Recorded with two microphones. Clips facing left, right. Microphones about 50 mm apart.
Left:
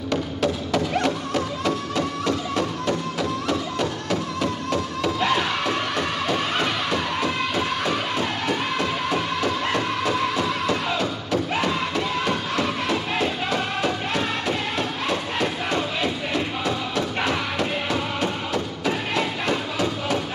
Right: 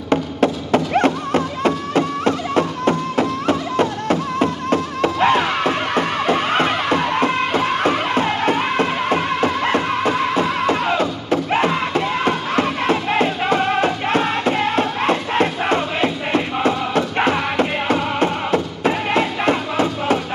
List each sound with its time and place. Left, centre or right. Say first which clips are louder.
0.1 s music: right 7 dB; right